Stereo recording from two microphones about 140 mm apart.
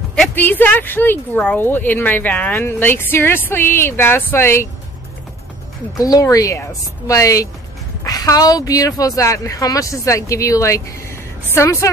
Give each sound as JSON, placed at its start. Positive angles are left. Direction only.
{"t": 0.1, "sound": "speech", "side_deg": 10}
{"t": 5.9, "sound": "speech", "side_deg": 25}